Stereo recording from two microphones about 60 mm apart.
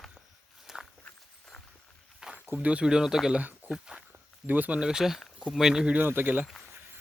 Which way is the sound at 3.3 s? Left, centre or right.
Right.